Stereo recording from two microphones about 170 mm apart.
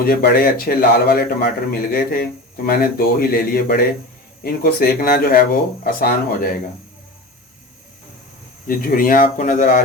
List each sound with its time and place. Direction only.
0.0 s a man's voice: 60° left (ahead or behind)
8.6 s a man's voice: 55° left (ahead or behind)